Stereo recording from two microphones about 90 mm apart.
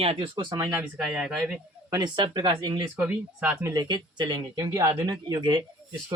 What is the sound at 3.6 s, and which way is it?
Speech, 45° right (ahead or behind).